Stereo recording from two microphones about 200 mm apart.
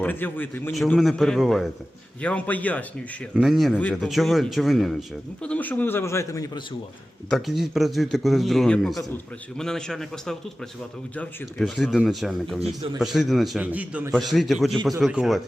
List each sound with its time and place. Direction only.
0.0 s a man's voice: 10° left (ahead or behind)
7.3 s speech: centre (ahead or behind)
12.6 s a man's voice: 25° right (ahead or behind)
13.0 s speech: centre (ahead or behind)